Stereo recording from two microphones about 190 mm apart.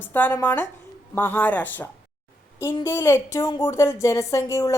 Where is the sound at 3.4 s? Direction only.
25° left (ahead or behind).